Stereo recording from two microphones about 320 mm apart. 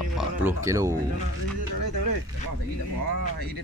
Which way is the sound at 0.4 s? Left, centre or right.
Centre.